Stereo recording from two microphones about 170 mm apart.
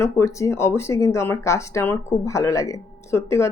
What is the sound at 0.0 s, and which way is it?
A woman's voice, 15° left (ahead or behind).